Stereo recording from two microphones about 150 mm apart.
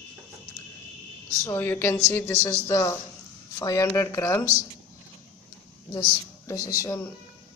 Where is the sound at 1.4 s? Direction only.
15° left (ahead or behind).